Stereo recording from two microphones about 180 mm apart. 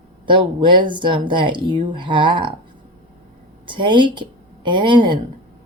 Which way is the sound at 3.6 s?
25° right (ahead or behind).